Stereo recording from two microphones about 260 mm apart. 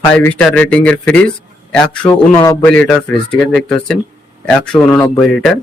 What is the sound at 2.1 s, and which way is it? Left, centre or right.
Speech, centre.